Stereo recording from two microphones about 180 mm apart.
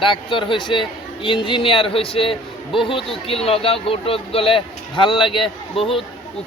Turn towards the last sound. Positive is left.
turn(degrees=30)  # may be behind; listen again after turning